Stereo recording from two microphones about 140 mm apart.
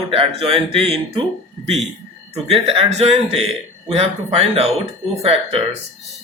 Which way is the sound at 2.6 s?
45° right (ahead or behind).